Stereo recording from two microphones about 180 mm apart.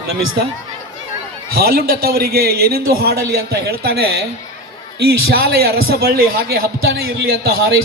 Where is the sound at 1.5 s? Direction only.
60° right (ahead or behind).